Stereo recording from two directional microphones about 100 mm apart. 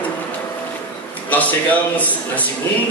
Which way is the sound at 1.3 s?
15° left (ahead or behind).